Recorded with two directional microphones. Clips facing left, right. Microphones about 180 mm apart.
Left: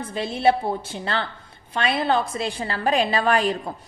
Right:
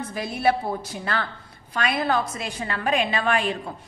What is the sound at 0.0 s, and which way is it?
A woman's voice, 25° left (ahead or behind).